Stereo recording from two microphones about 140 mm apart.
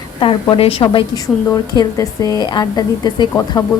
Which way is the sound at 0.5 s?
45° left (ahead or behind).